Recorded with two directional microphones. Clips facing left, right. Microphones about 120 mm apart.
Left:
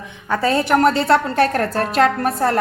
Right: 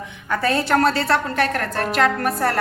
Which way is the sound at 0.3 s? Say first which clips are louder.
Left 3 dB; 20° left (ahead or behind).